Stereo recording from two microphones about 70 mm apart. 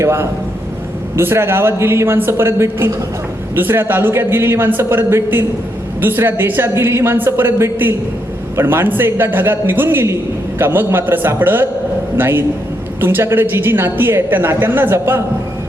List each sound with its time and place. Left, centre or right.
0.0 s a woman's voice: right